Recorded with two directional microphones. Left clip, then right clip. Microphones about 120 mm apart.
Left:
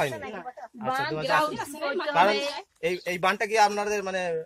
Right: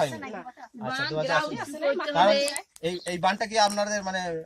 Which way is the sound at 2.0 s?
35° left (ahead or behind).